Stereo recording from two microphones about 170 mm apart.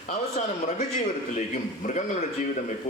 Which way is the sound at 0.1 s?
45° left (ahead or behind).